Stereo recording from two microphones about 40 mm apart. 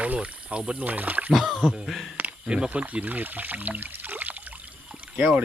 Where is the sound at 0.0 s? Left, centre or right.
Right.